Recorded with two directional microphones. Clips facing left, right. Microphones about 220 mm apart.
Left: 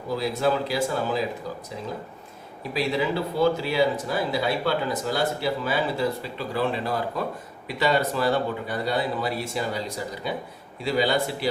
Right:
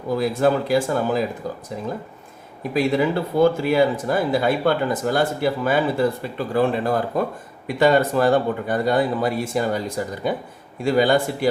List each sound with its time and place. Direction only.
0.1 s speech: 50° right (ahead or behind)
2.7 s speech: 50° right (ahead or behind)